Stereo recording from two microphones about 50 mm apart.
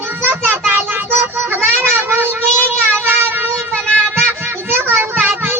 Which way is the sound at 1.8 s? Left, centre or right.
Right.